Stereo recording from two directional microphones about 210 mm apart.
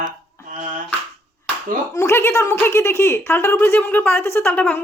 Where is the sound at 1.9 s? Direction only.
10° left (ahead or behind).